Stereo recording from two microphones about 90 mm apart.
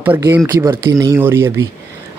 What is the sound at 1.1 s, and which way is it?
Speech, 30° right (ahead or behind).